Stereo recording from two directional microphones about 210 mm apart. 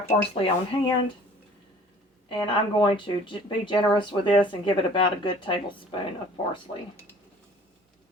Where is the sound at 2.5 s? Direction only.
25° left (ahead or behind).